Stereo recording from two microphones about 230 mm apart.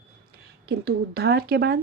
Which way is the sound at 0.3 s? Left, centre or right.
Right.